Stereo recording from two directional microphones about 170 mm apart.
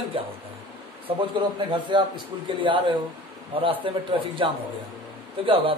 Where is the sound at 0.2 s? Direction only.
30° right (ahead or behind).